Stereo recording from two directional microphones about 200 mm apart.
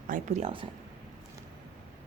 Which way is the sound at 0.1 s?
35° right (ahead or behind).